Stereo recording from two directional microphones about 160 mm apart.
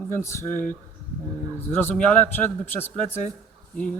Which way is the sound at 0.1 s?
15° left (ahead or behind).